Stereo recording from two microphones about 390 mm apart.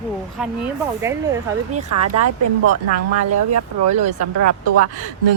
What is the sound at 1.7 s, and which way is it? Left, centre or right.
Speech, right.